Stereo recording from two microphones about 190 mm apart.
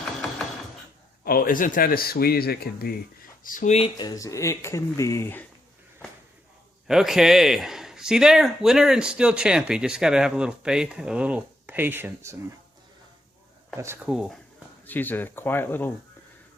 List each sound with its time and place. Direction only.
1.2 s speech: 50° left (ahead or behind); by 5.5 s 10° left (ahead or behind)
6.8 s a man's voice: centre (ahead or behind)
13.7 s speech: 15° right (ahead or behind)
14.8 s speech: 10° left (ahead or behind)